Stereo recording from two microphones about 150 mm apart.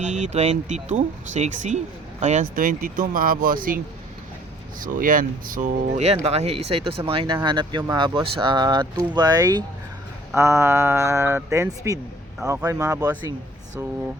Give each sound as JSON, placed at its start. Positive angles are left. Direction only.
{"t": 0.0, "sound": "speech", "side_deg": -50}
{"t": 4.8, "sound": "speech", "side_deg": -65}